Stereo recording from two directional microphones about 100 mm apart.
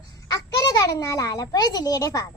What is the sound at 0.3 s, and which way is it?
A child's voice, 35° left (ahead or behind).